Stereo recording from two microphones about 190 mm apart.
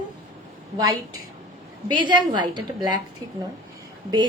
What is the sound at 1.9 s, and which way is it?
A woman's voice, 25° right (ahead or behind).